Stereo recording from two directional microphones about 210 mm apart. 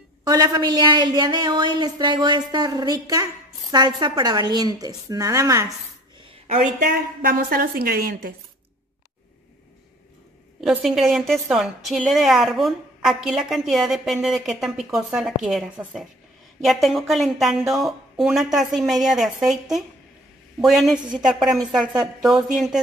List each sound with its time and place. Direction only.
0.2 s a woman's voice: 20° right (ahead or behind)
6.4 s a woman's voice: 35° right (ahead or behind)
10.6 s a woman's voice: centre (ahead or behind)